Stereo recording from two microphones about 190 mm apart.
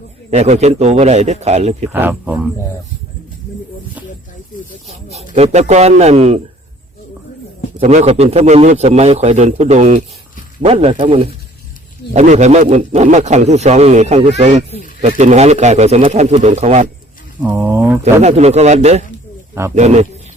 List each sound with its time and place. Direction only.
0.3 s speech: 35° right (ahead or behind)
1.9 s speech: 10° right (ahead or behind)
5.1 s speech: 35° right (ahead or behind)
7.8 s speech: 35° right (ahead or behind)
17.4 s speech: 10° right (ahead or behind)
18.0 s speech: 35° right (ahead or behind)